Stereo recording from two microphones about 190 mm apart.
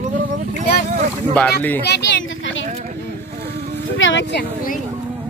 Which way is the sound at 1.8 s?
65° left (ahead or behind).